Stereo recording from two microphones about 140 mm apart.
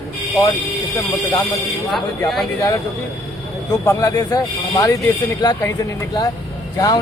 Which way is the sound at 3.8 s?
25° left (ahead or behind).